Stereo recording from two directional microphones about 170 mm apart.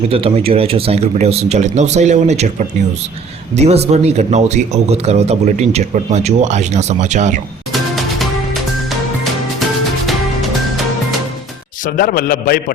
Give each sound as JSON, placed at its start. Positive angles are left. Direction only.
{"t": 0.1, "sound": "speech", "side_deg": -35}
{"t": 7.7, "sound": "music", "side_deg": 0}
{"t": 11.9, "sound": "a man's voice", "side_deg": 60}